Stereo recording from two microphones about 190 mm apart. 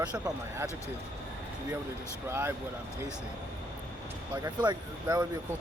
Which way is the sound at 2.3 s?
10° right (ahead or behind).